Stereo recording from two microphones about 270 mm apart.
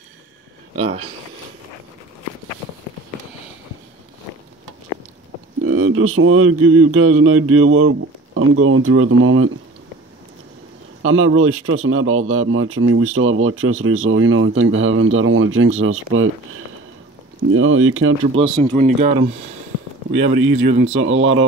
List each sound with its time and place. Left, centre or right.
0.7 s speech: right
5.6 s speech: right
11.0 s speech: right
18.3 s speech: right
20.1 s speech: right